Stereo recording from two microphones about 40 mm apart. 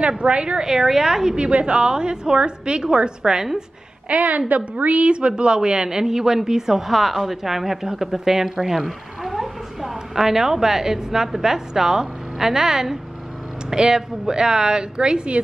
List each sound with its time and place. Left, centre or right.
0.2 s a woman's voice: right
4.1 s a woman's voice: right; by 6.8 s centre
6.9 s a woman's voice: centre; by 15.4 s right